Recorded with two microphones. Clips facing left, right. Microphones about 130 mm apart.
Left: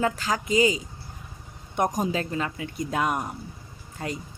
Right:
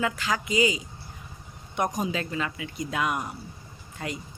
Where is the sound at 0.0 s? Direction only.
40° left (ahead or behind).